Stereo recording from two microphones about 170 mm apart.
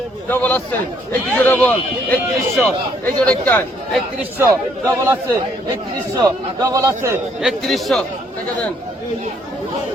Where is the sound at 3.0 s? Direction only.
10° left (ahead or behind).